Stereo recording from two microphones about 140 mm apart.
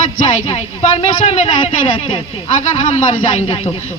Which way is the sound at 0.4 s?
50° left (ahead or behind).